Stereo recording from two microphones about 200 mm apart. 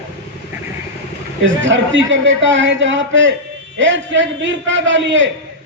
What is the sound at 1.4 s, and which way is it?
A man's voice, 70° right (ahead or behind).